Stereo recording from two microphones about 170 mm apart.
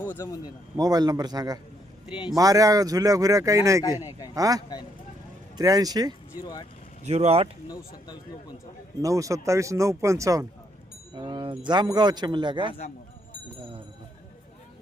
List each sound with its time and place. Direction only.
0.2 s speech: 20° left (ahead or behind)
0.8 s speech: 25° right (ahead or behind)
6.4 s speech: 25° left (ahead or behind)
7.0 s speech: 40° right (ahead or behind)
7.7 s speech: 25° left (ahead or behind)
9.0 s speech: 20° right (ahead or behind)